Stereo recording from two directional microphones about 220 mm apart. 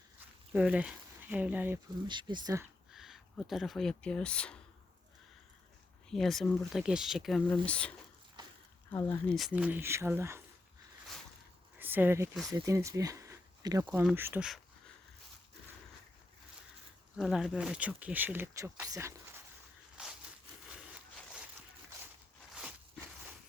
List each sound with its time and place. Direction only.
0.5 s speech: 5° right (ahead or behind)
2.0 s speech: 20° right (ahead or behind)
2.9 s speech: centre (ahead or behind)
6.1 s speech: centre (ahead or behind)
11.8 s speech: 10° right (ahead or behind)
17.2 s speech: centre (ahead or behind)
20.0 s a sound: 5° right (ahead or behind)